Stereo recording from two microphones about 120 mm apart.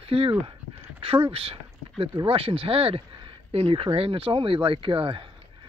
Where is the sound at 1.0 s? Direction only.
50° right (ahead or behind).